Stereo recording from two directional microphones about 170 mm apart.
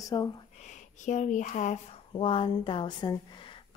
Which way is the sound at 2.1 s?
30° left (ahead or behind).